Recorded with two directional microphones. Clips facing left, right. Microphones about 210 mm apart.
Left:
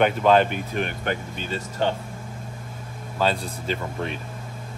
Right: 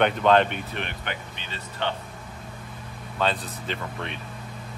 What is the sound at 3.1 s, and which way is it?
Speech, centre (ahead or behind).